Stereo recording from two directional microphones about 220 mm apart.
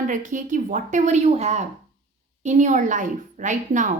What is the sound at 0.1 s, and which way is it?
A woman's voice, 35° right (ahead or behind).